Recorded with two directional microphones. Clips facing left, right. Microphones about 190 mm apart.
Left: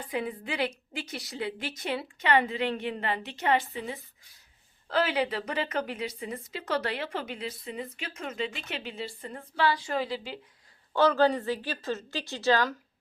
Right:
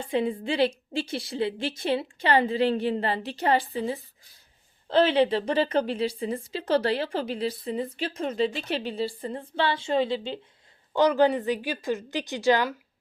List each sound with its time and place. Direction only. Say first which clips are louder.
0.0 s a woman's voice: right 6 dB; 25° right (ahead or behind)